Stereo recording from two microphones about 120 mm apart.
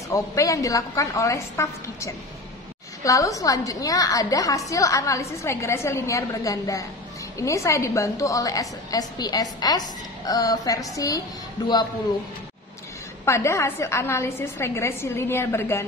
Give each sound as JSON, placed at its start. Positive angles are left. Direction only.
{"t": 0.1, "sound": "a woman's voice", "side_deg": 25}
{"t": 13.2, "sound": "a woman's voice", "side_deg": 25}